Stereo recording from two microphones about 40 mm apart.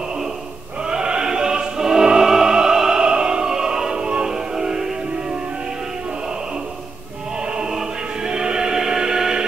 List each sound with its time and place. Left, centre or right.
0.8 s opera: right
8.3 s music: right